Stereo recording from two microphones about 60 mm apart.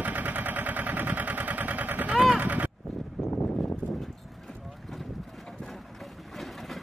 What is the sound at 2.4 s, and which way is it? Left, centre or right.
Vehicle, right.